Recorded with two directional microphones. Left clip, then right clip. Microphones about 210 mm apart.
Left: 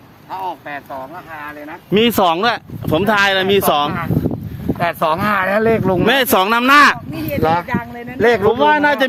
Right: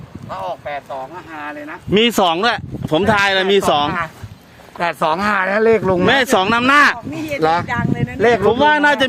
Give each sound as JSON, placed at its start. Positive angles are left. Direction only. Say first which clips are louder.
{"t": 1.9, "sound": "speech", "louder": "left 1 dB", "side_deg": 10}
{"t": 4.8, "sound": "speech", "louder": "even", "side_deg": -10}
{"t": 6.1, "sound": "speech", "louder": "left 1 dB", "side_deg": 25}
{"t": 7.7, "sound": "speech", "louder": "right 3 dB", "side_deg": -20}
{"t": 8.2, "sound": "speech", "louder": "left 1 dB", "side_deg": 15}
{"t": 8.4, "sound": "speech", "louder": "right 1 dB", "side_deg": -10}